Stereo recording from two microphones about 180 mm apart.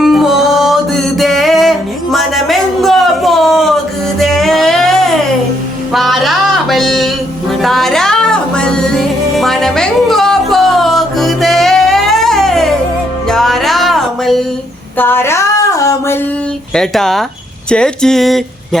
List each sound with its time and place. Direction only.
0.0 s music: centre (ahead or behind)
14.9 s a sound: 10° left (ahead or behind)
16.7 s speech: centre (ahead or behind)